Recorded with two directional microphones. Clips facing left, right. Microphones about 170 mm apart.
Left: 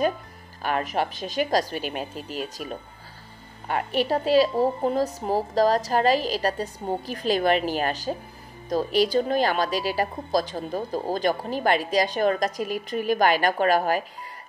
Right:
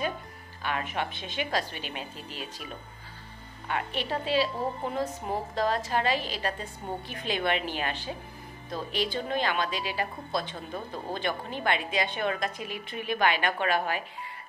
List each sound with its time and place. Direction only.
0.6 s a woman's voice: 40° left (ahead or behind)